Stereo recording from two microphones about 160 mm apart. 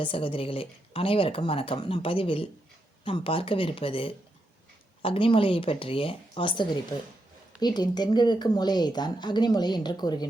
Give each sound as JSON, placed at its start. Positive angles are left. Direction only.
{"t": 0.0, "sound": "speech", "side_deg": 35}